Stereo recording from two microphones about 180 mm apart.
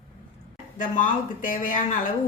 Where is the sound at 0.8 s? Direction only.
45° left (ahead or behind).